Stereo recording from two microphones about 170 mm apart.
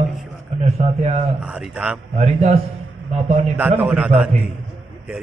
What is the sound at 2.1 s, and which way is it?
A man's voice, 40° right (ahead or behind).